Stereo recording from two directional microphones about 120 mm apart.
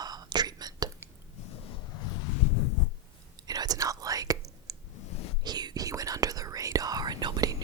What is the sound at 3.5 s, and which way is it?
Whispering, 30° right (ahead or behind).